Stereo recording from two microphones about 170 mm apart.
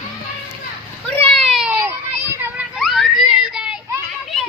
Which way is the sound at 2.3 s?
15° right (ahead or behind).